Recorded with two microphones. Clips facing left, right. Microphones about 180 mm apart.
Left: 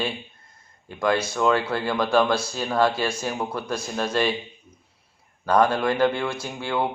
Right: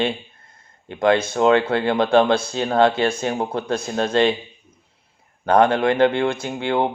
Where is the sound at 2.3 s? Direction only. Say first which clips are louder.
Right 5 dB; 55° right (ahead or behind).